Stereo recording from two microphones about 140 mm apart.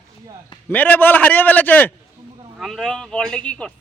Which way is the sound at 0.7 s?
15° left (ahead or behind).